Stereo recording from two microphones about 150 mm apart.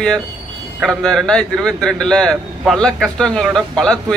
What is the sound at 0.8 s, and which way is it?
A man's voice, 5° left (ahead or behind).